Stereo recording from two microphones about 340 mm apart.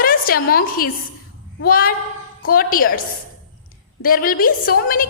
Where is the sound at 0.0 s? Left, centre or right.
Left.